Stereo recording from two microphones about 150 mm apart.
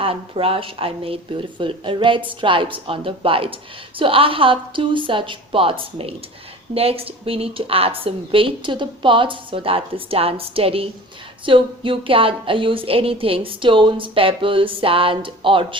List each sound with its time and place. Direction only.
0.0 s a woman's voice: 40° right (ahead or behind)